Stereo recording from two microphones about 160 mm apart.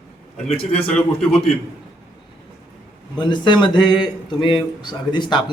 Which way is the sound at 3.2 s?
30° left (ahead or behind).